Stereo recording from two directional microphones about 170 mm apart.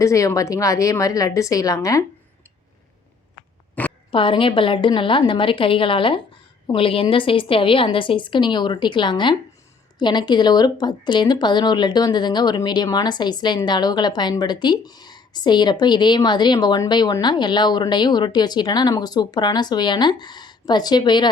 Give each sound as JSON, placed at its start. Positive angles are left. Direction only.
{"t": 0.0, "sound": "speech", "side_deg": 20}
{"t": 3.8, "sound": "a sound", "side_deg": 10}
{"t": 4.1, "sound": "a woman's voice", "side_deg": 30}